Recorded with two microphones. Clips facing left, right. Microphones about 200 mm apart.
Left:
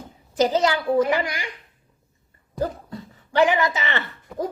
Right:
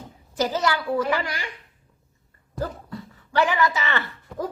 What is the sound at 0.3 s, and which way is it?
A woman's voice, 20° left (ahead or behind).